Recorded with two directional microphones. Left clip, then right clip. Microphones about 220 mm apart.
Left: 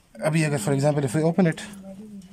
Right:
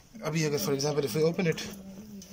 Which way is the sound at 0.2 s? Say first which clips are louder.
Left 6 dB; 45° left (ahead or behind).